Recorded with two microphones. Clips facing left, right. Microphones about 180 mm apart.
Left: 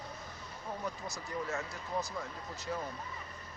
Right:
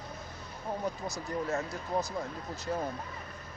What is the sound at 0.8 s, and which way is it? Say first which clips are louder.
Speech: right 5 dB; 40° right (ahead or behind).